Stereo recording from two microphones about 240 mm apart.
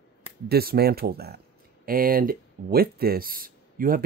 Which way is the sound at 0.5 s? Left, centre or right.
Right.